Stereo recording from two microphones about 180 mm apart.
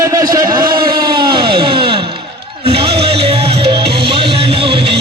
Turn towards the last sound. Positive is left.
turn(degrees=-30)  # may be behind; listen again after turning